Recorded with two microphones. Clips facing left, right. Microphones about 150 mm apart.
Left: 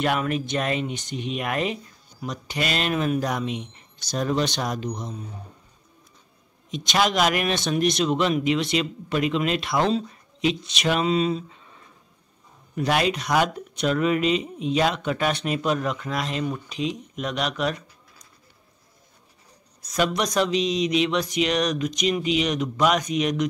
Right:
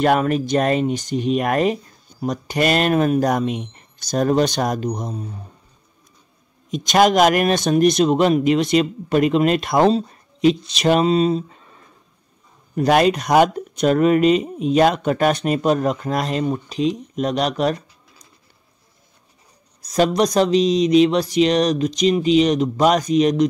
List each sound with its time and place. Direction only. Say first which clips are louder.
0.0 s speech: right 7 dB; 40° right (ahead or behind)
6.7 s speech: right 8 dB; 45° right (ahead or behind)
12.7 s speech: right 7 dB; 45° right (ahead or behind)
19.8 s speech: right 7 dB; 35° right (ahead or behind)